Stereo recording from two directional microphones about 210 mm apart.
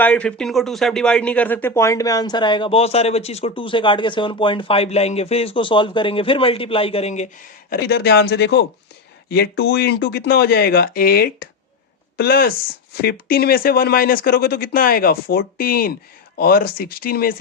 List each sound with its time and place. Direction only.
0.0 s speech: 5° left (ahead or behind); by 7.3 s 30° left (ahead or behind)
7.7 s speech: 50° left (ahead or behind)